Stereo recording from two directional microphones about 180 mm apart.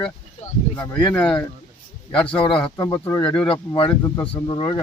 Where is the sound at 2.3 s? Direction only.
30° left (ahead or behind).